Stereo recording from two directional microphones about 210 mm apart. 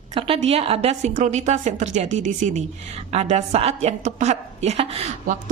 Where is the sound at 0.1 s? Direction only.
30° right (ahead or behind).